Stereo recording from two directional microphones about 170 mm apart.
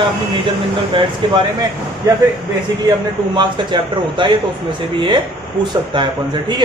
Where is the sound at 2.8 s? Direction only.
25° right (ahead or behind).